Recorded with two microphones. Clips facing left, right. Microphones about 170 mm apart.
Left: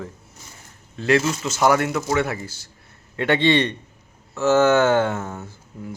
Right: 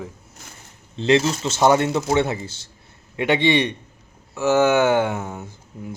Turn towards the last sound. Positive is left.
turn(degrees=-15)  # may be behind; listen again after turning